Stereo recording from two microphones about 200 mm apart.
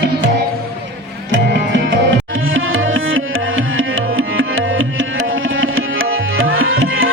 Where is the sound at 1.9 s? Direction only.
80° right.